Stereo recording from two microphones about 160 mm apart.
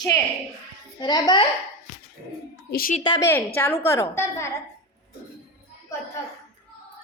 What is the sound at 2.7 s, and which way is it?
Speech, 65° left (ahead or behind).